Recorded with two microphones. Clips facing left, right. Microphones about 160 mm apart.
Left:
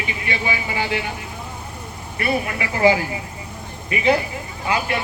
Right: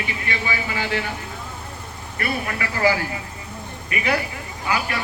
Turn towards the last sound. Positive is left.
turn(degrees=25)  # may be behind; listen again after turning